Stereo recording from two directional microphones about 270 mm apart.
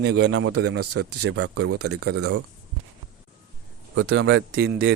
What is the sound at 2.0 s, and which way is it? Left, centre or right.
Speech, right.